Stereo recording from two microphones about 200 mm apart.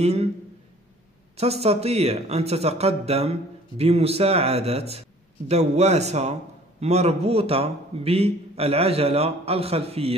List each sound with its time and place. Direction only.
0.0 s speech: 30° right (ahead or behind)
1.3 s speech: 30° right (ahead or behind)